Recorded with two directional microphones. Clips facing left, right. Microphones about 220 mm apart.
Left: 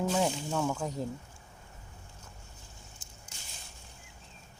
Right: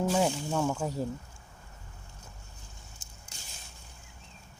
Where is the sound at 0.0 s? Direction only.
5° right (ahead or behind).